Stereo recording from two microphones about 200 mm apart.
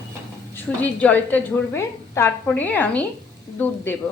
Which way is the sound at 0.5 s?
10° left (ahead or behind).